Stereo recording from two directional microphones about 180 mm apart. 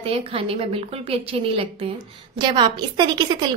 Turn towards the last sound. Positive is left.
turn(degrees=-25)  # may be behind; listen again after turning